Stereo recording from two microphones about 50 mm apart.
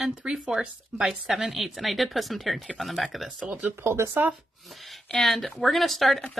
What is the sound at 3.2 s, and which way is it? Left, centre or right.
Speech, right.